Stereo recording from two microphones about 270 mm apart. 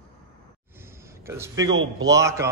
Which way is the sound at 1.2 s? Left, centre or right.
Centre.